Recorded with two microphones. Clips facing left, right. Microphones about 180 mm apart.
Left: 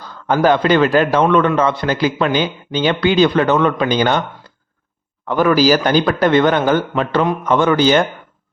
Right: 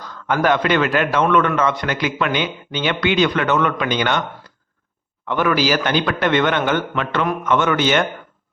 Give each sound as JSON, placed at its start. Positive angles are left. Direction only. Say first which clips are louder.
{"t": 0.0, "sound": "a man's voice", "louder": "left 4 dB", "side_deg": 30}
{"t": 5.3, "sound": "a man's voice", "louder": "left 5 dB", "side_deg": 40}